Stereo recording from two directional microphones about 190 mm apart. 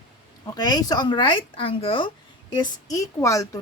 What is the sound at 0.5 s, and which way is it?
A woman's voice, 20° left (ahead or behind).